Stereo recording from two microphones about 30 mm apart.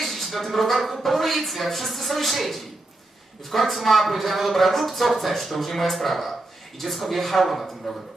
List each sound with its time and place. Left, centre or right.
0.0 s speech: centre